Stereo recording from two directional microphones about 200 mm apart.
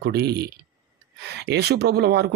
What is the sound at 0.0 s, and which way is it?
Speech, 55° right (ahead or behind).